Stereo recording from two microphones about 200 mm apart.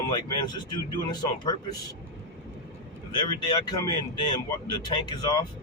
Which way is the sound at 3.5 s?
20° left (ahead or behind).